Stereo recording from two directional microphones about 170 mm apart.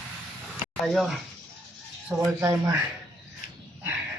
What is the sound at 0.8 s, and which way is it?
Speech, centre (ahead or behind).